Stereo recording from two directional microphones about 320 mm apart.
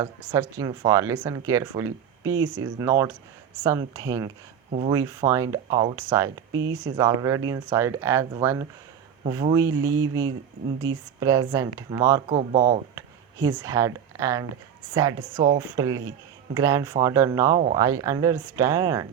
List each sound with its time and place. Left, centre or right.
0.0 s speech: centre
4.9 s speech: centre
12.4 s speech: right
13.0 s speech: centre